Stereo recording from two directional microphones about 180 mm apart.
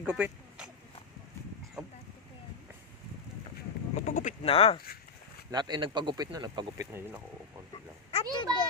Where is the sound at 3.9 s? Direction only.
45° left (ahead or behind).